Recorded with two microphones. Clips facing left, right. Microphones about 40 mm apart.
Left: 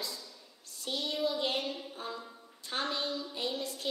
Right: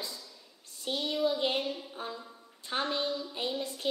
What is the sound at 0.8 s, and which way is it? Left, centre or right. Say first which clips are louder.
Child singing: right 2 dB; right.